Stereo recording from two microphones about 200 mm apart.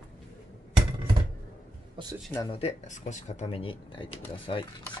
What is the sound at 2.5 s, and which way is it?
Speech, 35° left (ahead or behind).